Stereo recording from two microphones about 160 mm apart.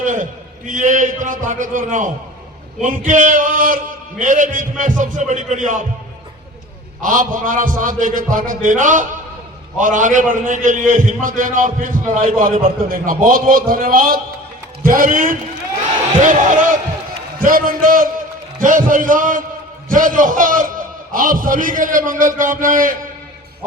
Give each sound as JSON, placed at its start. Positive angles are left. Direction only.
{"t": 0.0, "sound": "a man's voice", "side_deg": -55}
{"t": 7.0, "sound": "a man's voice", "side_deg": -55}